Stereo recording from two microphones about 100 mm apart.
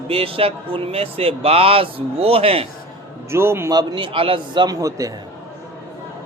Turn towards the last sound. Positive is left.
turn(degrees=-35)  # may be behind; listen again after turning